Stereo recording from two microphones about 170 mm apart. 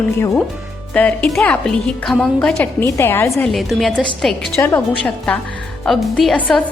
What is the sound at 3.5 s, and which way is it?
A woman's voice, centre (ahead or behind).